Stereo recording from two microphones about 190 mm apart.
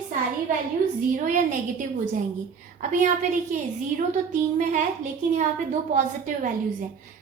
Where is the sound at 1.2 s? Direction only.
45° right (ahead or behind).